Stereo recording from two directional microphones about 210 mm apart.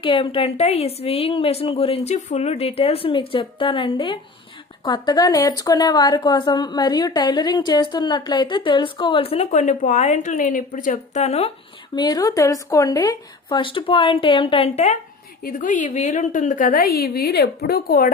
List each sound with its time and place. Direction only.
0.0 s a woman's voice: 25° left (ahead or behind)
11.9 s a woman's voice: 20° left (ahead or behind); by 18.1 s 45° left (ahead or behind)